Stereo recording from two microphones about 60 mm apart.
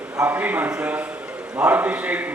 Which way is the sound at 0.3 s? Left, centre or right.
Right.